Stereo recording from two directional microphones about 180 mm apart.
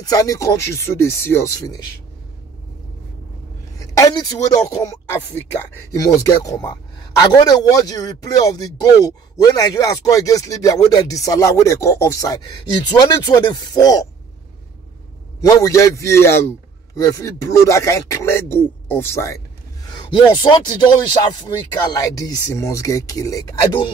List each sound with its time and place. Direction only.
0.0 s a man's voice: 20° left (ahead or behind)
3.7 s a man's voice: 20° left (ahead or behind)
15.4 s a man's voice: 20° left (ahead or behind)